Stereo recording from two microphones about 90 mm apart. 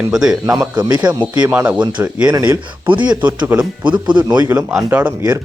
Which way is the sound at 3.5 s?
15° right (ahead or behind).